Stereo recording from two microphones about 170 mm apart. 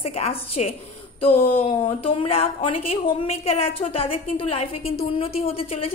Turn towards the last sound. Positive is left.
turn(degrees=35)  # may be behind; listen again after turning